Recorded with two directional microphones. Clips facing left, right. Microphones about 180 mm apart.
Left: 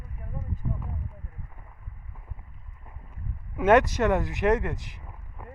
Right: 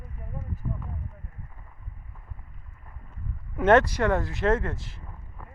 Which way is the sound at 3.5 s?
10° left (ahead or behind).